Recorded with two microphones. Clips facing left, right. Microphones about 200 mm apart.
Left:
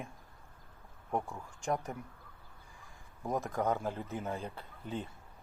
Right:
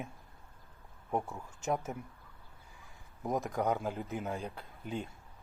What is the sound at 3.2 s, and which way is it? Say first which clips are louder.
Speech: right 1 dB; centre (ahead or behind).